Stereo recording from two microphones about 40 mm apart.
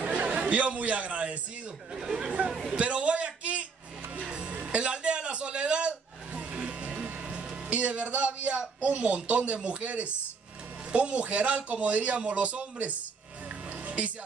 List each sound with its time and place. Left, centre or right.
0.0 s a sound: right
2.0 s speech: centre
2.8 s a sound: right
4.3 s music: right
7.7 s a man's voice: right
13.7 s music: right